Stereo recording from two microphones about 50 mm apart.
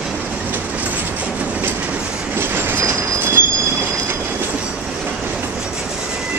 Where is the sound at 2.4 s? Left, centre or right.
Right.